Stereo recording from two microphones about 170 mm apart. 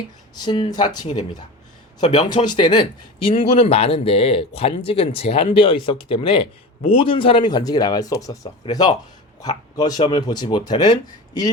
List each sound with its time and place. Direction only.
0.3 s speech: 25° left (ahead or behind)
2.0 s speech: 40° left (ahead or behind)
2.3 s speech: 25° left (ahead or behind)
3.3 s speech: 40° left (ahead or behind); by 11.5 s 25° left (ahead or behind)